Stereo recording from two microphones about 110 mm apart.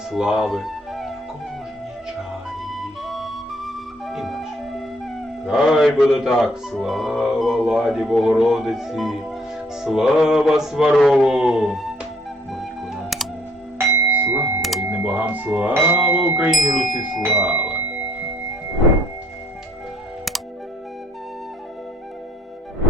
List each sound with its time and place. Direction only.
0.1 s speech: centre (ahead or behind)
2.6 s music: centre (ahead or behind)
9.8 s mantra: 5° right (ahead or behind)
12.5 s music: centre (ahead or behind)
13.7 s music: 20° right (ahead or behind)
14.6 s music: centre (ahead or behind)
14.8 s speech: 15° right (ahead or behind)
15.7 s mantra: 20° right (ahead or behind)
17.2 s speech: 10° right (ahead or behind)